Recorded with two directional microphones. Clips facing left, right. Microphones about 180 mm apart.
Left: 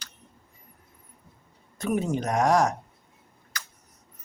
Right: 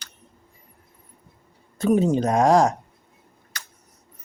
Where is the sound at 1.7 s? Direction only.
30° right (ahead or behind).